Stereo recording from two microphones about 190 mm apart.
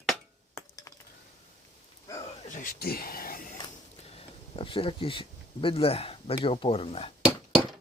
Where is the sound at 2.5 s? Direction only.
50° left (ahead or behind).